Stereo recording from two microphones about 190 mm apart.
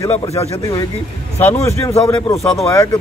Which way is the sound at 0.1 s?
35° left (ahead or behind).